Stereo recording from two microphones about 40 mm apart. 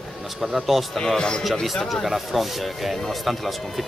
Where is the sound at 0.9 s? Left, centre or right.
Centre.